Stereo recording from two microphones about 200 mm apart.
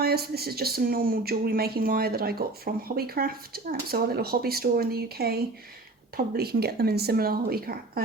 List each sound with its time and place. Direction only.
0.0 s speech: 50° right (ahead or behind)